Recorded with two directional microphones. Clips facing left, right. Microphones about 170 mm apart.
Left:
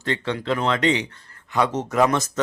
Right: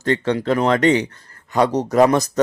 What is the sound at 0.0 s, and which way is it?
Speech, 45° right (ahead or behind).